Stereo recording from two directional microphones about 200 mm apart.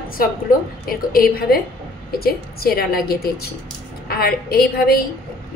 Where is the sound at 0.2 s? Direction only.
45° left (ahead or behind).